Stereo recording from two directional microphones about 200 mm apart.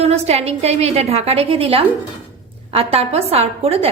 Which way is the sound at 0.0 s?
30° right (ahead or behind).